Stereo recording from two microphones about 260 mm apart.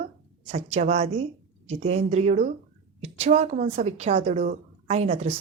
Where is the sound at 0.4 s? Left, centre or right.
Right.